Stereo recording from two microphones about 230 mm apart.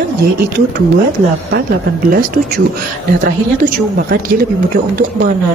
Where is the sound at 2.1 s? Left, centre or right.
Right.